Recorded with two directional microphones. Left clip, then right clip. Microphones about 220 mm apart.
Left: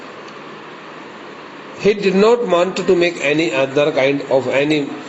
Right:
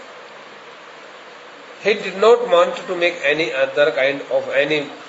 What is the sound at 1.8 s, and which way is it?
A man's voice, 25° left (ahead or behind).